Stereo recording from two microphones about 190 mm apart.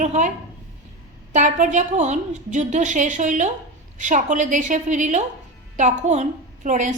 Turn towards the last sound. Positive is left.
turn(degrees=-40)  # may be behind; listen again after turning